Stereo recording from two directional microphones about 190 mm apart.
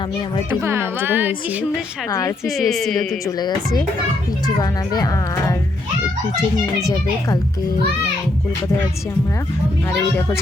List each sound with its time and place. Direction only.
0.6 s speech: 15° right (ahead or behind)
2.0 s a woman's voice: 15° left (ahead or behind)
2.5 s speech: centre (ahead or behind)
3.2 s a woman's voice: 20° left (ahead or behind)
4.5 s a woman's voice: 20° left (ahead or behind)